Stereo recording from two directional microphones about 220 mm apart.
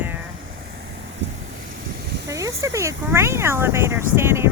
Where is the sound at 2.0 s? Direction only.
50° right (ahead or behind).